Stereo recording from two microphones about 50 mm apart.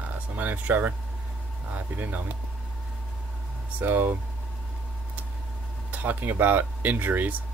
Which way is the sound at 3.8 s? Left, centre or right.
Right.